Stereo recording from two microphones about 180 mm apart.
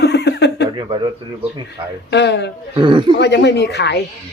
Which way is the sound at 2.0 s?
70° left (ahead or behind).